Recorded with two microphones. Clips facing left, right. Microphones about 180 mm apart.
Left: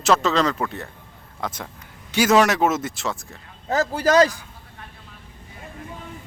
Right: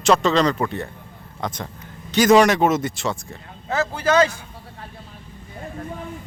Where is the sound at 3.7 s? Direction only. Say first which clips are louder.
Left 1 dB; 35° left (ahead or behind).